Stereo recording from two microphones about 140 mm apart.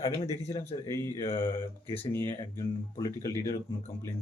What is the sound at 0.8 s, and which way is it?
Speech, 20° left (ahead or behind).